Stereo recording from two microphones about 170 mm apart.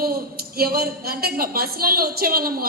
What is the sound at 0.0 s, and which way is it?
A woman's voice, 65° right (ahead or behind).